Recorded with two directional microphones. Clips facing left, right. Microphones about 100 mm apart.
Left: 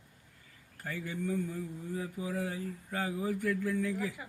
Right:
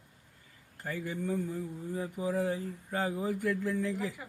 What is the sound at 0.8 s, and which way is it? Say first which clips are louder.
Speech: right 2 dB; 25° right (ahead or behind).